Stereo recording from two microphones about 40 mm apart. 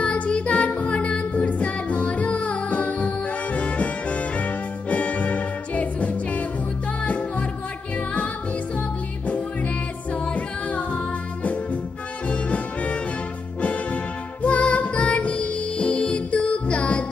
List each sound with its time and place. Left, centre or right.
0.0 s music: left
8.7 s music: left
10.1 s a capella: left
11.4 s music: left